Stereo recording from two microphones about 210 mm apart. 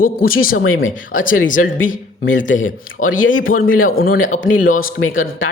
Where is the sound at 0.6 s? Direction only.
80° left.